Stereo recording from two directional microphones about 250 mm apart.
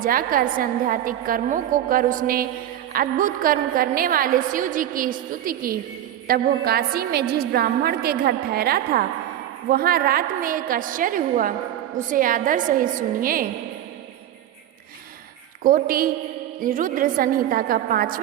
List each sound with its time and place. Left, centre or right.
0.0 s a woman's voice: right
15.6 s a woman's voice: right